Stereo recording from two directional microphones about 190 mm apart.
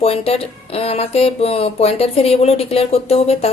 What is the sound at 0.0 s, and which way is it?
Speech, 30° left (ahead or behind).